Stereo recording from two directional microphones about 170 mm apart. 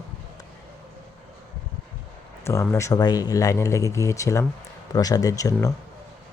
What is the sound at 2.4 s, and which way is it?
Speech, 15° left (ahead or behind).